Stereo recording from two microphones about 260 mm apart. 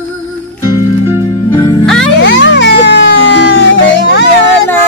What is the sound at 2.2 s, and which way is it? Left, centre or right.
Music, left.